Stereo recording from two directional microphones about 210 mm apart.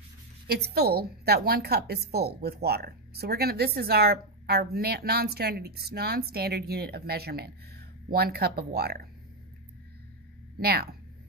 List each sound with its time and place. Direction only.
0.5 s speech: 50° right (ahead or behind)
10.6 s speech: 45° right (ahead or behind)